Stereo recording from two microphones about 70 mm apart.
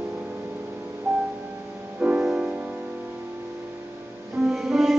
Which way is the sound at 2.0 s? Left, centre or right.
Centre.